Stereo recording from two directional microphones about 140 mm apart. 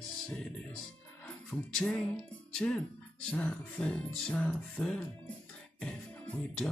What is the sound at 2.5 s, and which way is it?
Speech, 5° left (ahead or behind).